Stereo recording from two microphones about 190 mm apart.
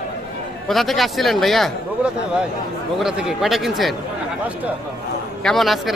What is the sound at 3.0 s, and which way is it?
Speech, centre (ahead or behind).